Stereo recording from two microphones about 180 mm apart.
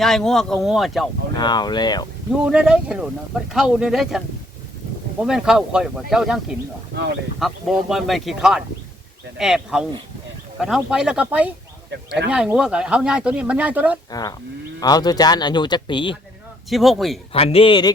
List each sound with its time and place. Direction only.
0.0 s speech: centre (ahead or behind)
1.4 s speech: 25° left (ahead or behind)
2.4 s speech: 5° right (ahead or behind)
5.2 s speech: 5° right (ahead or behind)
6.9 s speech: 75° right (ahead or behind)
7.3 s speech: centre (ahead or behind)
14.1 s speech: 20° left (ahead or behind)
16.6 s speech: centre (ahead or behind)
17.3 s speech: 30° left (ahead or behind)